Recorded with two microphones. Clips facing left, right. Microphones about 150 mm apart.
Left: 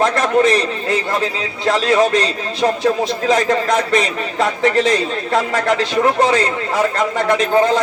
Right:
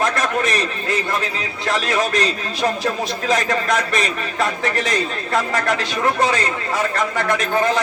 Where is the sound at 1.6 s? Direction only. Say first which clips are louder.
Left 6 dB; 25° left (ahead or behind).